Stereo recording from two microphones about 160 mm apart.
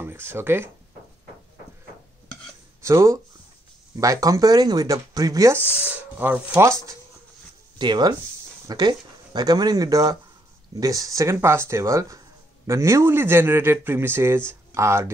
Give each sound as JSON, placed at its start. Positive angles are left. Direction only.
{"t": 0.0, "sound": "speech", "side_deg": -15}
{"t": 2.8, "sound": "speech", "side_deg": -15}
{"t": 5.8, "sound": "a man's voice", "side_deg": -10}
{"t": 7.8, "sound": "a man's voice", "side_deg": -25}